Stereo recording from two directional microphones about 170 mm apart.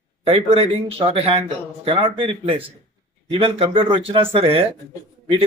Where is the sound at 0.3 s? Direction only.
35° right (ahead or behind).